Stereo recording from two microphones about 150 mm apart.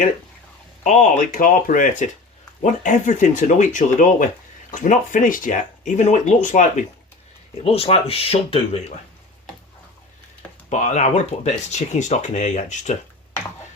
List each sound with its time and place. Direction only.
0.9 s speech: 55° left (ahead or behind)
7.6 s speech: 40° left (ahead or behind)
10.7 s speech: 55° left (ahead or behind)